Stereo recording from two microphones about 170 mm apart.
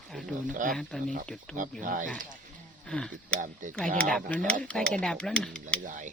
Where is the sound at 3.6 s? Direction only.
50° right (ahead or behind).